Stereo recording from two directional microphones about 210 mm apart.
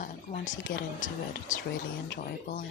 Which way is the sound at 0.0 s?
40° left (ahead or behind).